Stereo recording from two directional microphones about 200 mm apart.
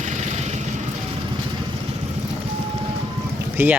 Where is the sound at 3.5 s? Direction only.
10° right (ahead or behind).